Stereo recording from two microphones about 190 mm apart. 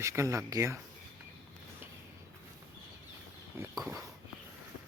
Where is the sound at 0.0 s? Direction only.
15° right (ahead or behind).